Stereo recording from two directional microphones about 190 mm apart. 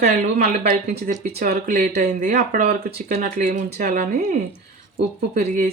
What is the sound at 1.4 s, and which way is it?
Speech, 50° right (ahead or behind).